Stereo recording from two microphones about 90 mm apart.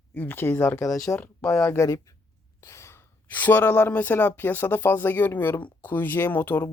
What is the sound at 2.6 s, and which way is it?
Sigh, 30° left (ahead or behind).